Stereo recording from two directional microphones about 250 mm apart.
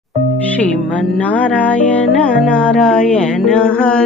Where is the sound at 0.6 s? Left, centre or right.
Centre.